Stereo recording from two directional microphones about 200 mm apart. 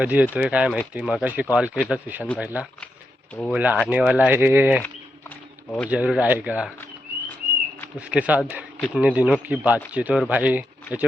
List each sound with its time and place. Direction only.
0.0 s speech: 5° right (ahead or behind)
5.3 s a sound: 10° left (ahead or behind)
5.9 s speech: 5° right (ahead or behind)
7.9 s speech: 5° right (ahead or behind)